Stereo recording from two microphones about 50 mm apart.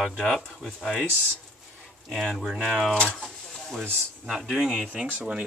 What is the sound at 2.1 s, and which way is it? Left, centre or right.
Speech, centre.